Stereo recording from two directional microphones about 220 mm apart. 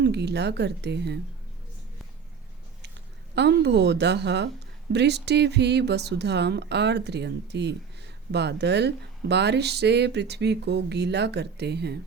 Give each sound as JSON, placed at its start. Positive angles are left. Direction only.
{"t": 0.0, "sound": "speech", "side_deg": -50}
{"t": 3.3, "sound": "speech", "side_deg": -50}